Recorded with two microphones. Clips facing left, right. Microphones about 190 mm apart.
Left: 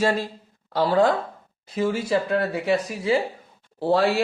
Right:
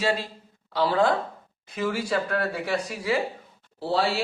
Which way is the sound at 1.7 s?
25° left (ahead or behind).